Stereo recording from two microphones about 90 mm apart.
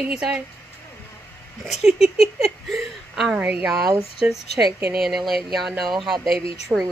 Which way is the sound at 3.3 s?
10° right (ahead or behind).